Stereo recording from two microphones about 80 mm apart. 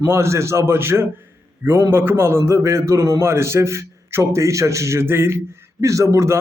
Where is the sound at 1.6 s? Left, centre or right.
Right.